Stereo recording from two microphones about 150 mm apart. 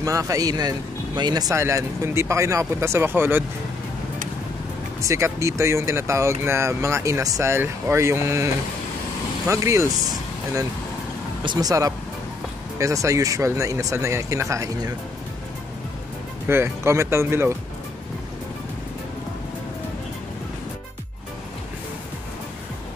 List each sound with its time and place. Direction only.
0.0 s speech: 20° right (ahead or behind)
5.0 s speech: 20° right (ahead or behind)
9.5 s speech: 20° right (ahead or behind)
11.4 s speech: 25° right (ahead or behind)
16.4 s speech: 15° right (ahead or behind)